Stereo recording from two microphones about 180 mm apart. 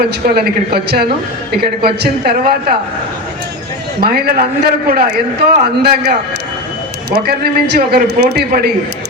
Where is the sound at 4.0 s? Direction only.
55° right (ahead or behind).